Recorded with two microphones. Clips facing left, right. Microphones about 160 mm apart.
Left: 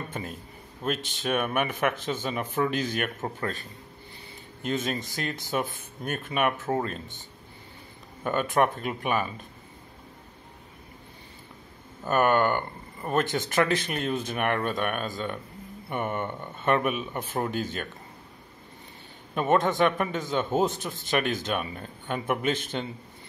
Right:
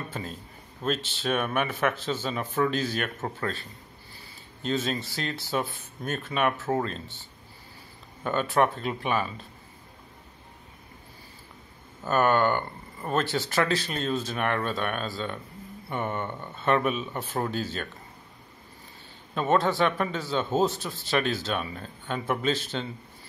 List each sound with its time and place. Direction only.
0.8 s speech: 15° left (ahead or behind)
4.6 s speech: 15° left (ahead or behind)
8.2 s speech: 15° left (ahead or behind)
12.0 s speech: 15° left (ahead or behind)
19.3 s speech: 15° left (ahead or behind)